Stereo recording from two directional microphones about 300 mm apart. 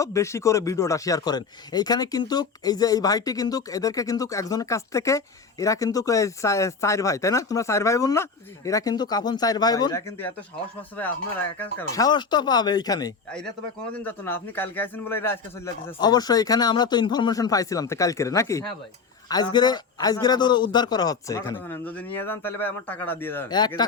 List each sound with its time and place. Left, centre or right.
0.0 s speech: centre